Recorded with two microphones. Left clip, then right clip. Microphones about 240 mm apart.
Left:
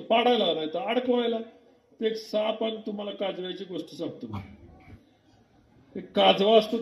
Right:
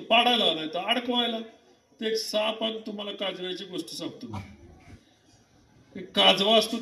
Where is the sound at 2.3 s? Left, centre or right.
Right.